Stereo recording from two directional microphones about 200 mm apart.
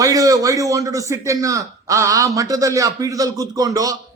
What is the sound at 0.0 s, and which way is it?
A man's voice, 15° right (ahead or behind).